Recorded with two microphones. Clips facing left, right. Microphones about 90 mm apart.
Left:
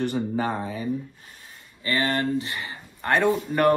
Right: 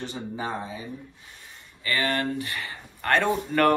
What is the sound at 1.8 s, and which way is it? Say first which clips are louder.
Speech: left 2 dB; 25° left (ahead or behind).